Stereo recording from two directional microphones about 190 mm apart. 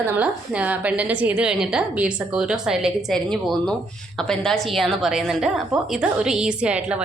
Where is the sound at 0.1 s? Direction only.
5° right (ahead or behind).